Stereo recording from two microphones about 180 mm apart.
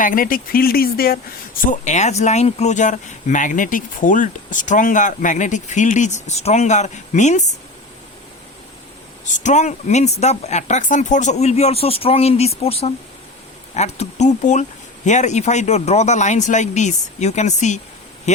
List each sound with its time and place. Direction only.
0.0 s speech: 50° left (ahead or behind)
1.6 s speech: 45° left (ahead or behind)
9.2 s speech: 40° left (ahead or behind)